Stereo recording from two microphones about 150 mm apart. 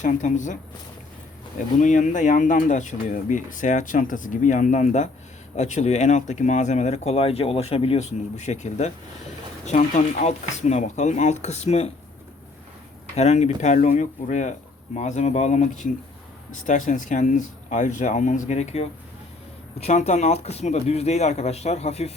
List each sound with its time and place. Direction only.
0.0 s speech: 55° left (ahead or behind)
1.8 s speech: 55° left (ahead or behind)
13.1 s speech: 45° left (ahead or behind)